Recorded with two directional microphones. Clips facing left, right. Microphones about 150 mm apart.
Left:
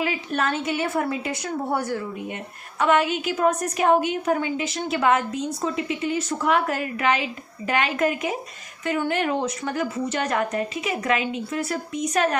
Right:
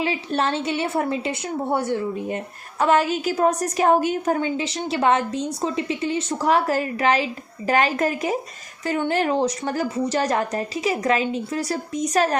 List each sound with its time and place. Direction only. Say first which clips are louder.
0.0 s a woman's voice: right 2 dB; 30° right (ahead or behind)